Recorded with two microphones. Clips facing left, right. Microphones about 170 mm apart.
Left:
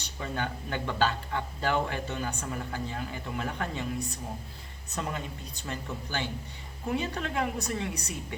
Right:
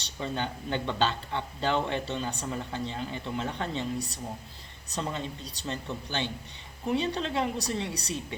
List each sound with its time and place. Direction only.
0.2 s speech: 25° right (ahead or behind)
4.9 s speech: 25° right (ahead or behind)